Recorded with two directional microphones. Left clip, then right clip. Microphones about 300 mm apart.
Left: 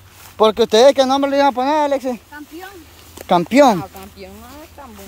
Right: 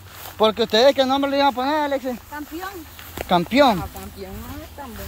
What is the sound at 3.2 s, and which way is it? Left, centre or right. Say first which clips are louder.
Speech: left 4 dB; left.